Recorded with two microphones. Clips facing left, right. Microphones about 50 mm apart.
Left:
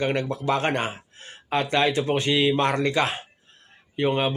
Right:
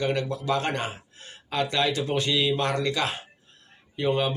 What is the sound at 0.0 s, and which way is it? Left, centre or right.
Speech, left.